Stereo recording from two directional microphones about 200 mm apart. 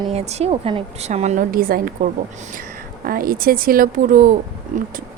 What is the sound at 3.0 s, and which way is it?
Speech, 45° right (ahead or behind).